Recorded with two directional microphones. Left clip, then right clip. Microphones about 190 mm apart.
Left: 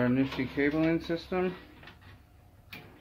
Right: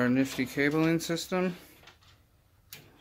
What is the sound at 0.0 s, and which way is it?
Speech, 60° right (ahead or behind).